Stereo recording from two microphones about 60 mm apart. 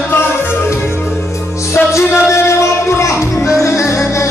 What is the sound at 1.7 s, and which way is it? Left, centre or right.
Music, left.